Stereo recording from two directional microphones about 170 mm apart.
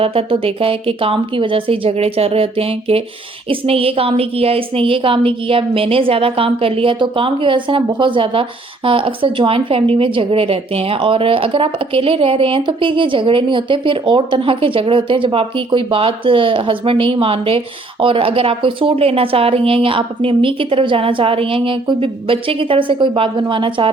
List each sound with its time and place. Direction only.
0.0 s a woman's voice: 35° right (ahead or behind)